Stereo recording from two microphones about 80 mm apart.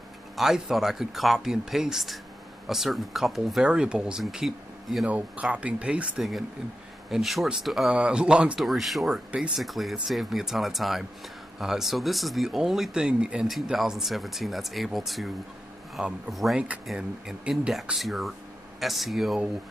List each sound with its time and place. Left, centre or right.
0.4 s speech: centre
5.0 s speech: centre
7.1 s speech: centre
8.5 s speech: centre
13.5 s speech: centre
16.5 s speech: centre
16.8 s speech: centre